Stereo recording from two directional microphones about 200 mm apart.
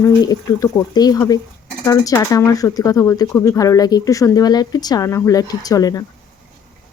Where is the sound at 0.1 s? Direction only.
20° left (ahead or behind).